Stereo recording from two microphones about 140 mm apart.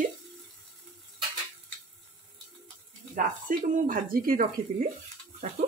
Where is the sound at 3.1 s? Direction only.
80° right.